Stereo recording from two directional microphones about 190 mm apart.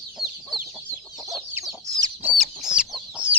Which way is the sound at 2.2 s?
5° right (ahead or behind).